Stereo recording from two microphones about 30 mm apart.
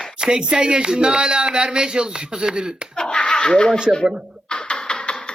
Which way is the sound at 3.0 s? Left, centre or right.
Left.